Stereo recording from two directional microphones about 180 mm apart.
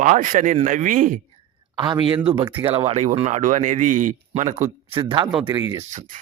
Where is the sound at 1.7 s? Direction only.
25° right (ahead or behind); by 4.6 s 40° right (ahead or behind).